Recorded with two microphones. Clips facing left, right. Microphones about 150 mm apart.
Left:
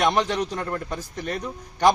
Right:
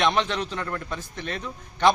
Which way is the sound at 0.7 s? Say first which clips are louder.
Left 3 dB; 25° left (ahead or behind).